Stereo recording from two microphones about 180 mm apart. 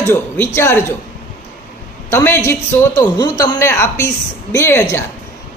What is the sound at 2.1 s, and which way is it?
A woman's voice, 15° left (ahead or behind).